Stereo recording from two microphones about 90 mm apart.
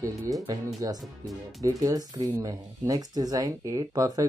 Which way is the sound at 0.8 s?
45° right (ahead or behind).